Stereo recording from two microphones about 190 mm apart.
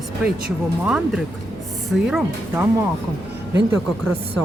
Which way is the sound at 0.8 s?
5° right (ahead or behind).